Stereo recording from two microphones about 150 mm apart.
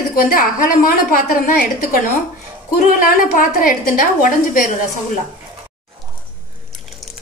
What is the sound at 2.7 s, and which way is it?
A woman's voice, 65° left (ahead or behind).